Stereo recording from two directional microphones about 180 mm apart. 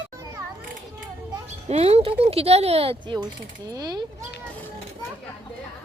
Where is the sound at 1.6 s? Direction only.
35° right (ahead or behind).